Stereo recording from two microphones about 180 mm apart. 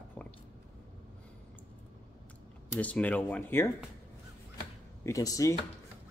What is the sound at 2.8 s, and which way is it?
Speech, 10° left (ahead or behind).